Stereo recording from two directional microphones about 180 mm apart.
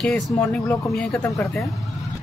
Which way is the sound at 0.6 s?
15° left (ahead or behind).